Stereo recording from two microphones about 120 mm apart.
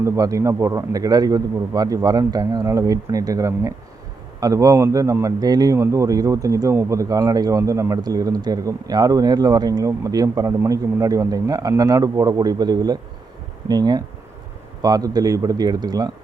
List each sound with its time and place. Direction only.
0.0 s speech: 25° right (ahead or behind)